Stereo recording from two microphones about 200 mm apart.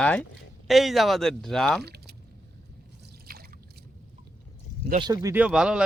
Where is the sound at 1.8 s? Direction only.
55° right (ahead or behind).